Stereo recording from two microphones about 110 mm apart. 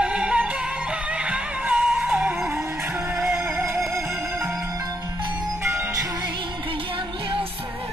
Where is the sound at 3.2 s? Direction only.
25° right (ahead or behind).